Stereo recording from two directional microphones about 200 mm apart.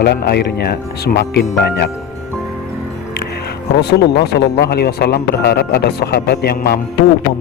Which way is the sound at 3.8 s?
55° left (ahead or behind).